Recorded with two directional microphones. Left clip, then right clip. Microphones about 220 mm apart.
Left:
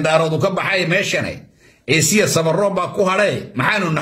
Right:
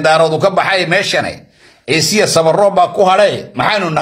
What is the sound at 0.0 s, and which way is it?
A man's voice, 15° left (ahead or behind).